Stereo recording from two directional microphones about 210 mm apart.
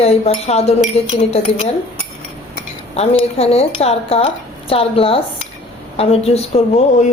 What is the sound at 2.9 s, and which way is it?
Speech, 30° left (ahead or behind).